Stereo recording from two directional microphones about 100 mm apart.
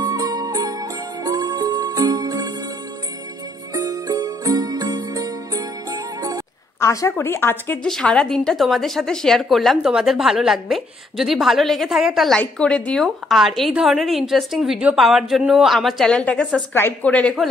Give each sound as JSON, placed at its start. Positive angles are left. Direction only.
{"t": 0.0, "sound": "music", "side_deg": -40}
{"t": 3.7, "sound": "music", "side_deg": -40}
{"t": 6.8, "sound": "speech", "side_deg": 30}
{"t": 7.8, "sound": "a woman's voice", "side_deg": 5}
{"t": 12.4, "sound": "a woman's voice", "side_deg": 10}
{"t": 16.7, "sound": "speech", "side_deg": 20}
{"t": 17.1, "sound": "speech", "side_deg": 10}